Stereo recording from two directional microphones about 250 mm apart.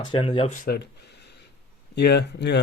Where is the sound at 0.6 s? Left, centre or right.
Left.